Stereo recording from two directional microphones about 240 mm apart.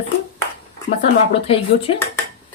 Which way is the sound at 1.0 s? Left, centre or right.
Left.